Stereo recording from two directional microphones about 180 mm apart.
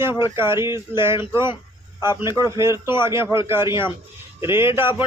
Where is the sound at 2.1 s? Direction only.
20° left (ahead or behind).